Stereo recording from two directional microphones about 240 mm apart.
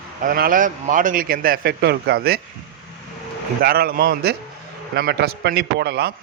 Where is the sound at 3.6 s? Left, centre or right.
Right.